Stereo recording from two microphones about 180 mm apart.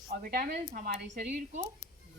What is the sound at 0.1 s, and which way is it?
Speech, 60° right (ahead or behind).